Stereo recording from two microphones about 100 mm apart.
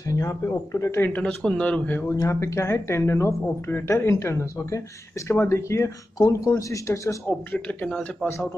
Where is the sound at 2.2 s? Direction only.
30° left (ahead or behind).